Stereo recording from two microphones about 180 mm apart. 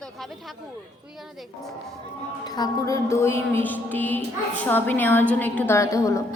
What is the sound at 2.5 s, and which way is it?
A woman's voice, 20° left (ahead or behind).